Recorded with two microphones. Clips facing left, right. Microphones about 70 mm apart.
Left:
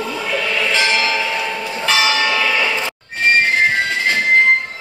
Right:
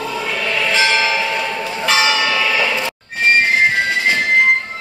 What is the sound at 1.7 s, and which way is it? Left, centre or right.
Church bell, right.